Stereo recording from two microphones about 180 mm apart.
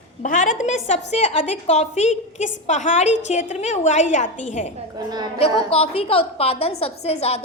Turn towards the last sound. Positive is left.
turn(degrees=35)  # may be behind; listen again after turning